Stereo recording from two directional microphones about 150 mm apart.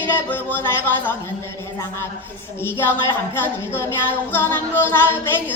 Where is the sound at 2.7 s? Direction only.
15° left (ahead or behind).